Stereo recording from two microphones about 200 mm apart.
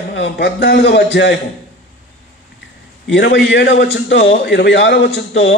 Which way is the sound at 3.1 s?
65° left (ahead or behind).